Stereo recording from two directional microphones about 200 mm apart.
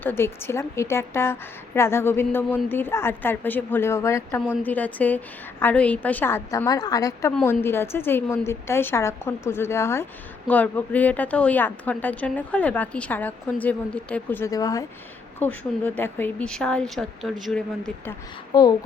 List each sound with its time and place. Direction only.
0.0 s a woman's voice: 10° left (ahead or behind)
18.5 s speech: 20° left (ahead or behind)